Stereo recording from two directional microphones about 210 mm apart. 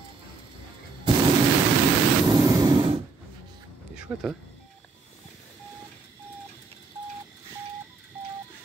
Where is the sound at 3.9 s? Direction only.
5° right (ahead or behind).